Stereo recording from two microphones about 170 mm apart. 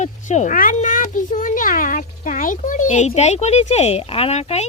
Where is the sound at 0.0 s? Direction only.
45° left (ahead or behind).